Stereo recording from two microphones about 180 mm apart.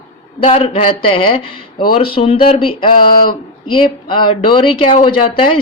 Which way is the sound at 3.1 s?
55° left (ahead or behind).